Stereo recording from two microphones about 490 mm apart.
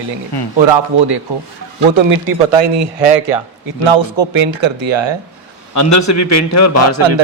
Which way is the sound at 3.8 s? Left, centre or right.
Right.